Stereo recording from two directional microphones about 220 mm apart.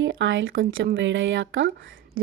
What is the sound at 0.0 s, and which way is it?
Speech, 60° right (ahead or behind).